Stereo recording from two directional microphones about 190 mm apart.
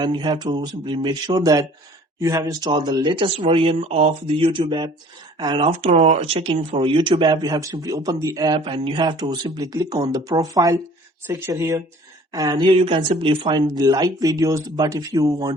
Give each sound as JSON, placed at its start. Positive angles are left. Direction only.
{"t": 0.0, "sound": "speech", "side_deg": -25}